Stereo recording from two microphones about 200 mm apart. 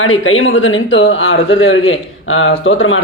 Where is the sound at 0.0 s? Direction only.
80° left.